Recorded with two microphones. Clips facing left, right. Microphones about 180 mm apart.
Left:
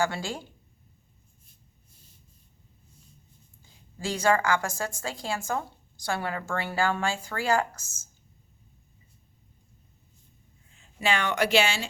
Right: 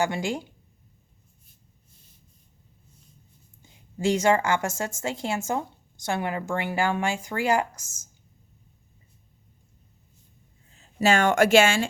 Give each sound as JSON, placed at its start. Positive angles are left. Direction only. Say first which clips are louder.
{"t": 0.0, "sound": "a woman's voice", "louder": "right 3 dB", "side_deg": -20}
{"t": 3.6, "sound": "a woman's voice", "louder": "right 9 dB", "side_deg": -20}
{"t": 10.8, "sound": "speech", "louder": "right 6 dB", "side_deg": -45}